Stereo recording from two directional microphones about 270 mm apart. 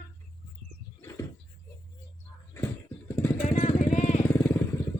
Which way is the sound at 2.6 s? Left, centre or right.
Centre.